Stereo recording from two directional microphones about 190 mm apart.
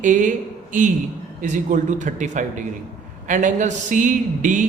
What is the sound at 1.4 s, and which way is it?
Speech, 40° right (ahead or behind).